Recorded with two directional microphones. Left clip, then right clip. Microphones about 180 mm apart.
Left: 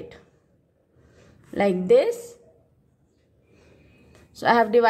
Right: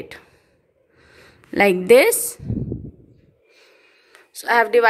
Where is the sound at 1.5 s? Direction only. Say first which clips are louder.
Right 6 dB; 15° right (ahead or behind).